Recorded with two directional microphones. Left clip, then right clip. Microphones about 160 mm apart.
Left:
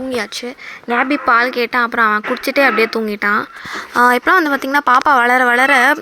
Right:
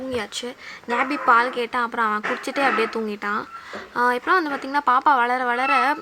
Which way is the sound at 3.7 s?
45° left (ahead or behind).